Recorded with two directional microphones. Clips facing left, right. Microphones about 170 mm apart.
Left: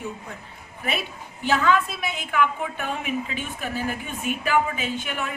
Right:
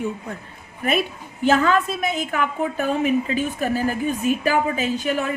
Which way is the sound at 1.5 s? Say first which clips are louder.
Right 3 dB; 45° right (ahead or behind).